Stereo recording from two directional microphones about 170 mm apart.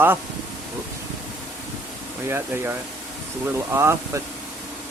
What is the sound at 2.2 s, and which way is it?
Speech, 15° right (ahead or behind).